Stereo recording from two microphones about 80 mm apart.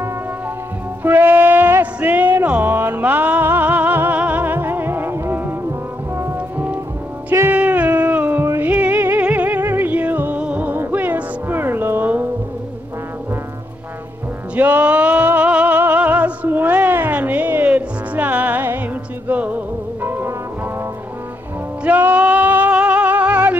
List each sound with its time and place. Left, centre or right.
1.0 s music: right
6.3 s music: right
14.5 s music: centre
21.8 s music: right